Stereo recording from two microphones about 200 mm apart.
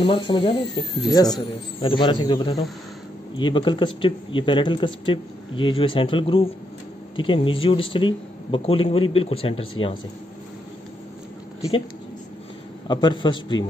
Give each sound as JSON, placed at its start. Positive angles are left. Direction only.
{"t": 0.1, "sound": "speech", "side_deg": 25}
{"t": 12.8, "sound": "speech", "side_deg": 20}